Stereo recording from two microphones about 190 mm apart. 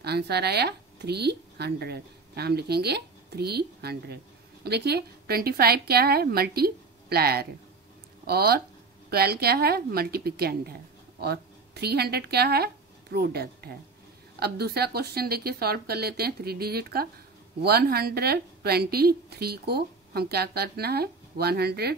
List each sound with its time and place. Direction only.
0.0 s a woman's voice: 60° right (ahead or behind)